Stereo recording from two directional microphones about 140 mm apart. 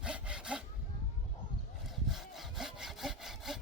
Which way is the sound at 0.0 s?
5° right (ahead or behind).